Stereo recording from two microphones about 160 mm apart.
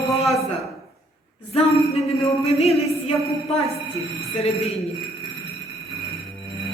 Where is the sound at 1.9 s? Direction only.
40° left (ahead or behind).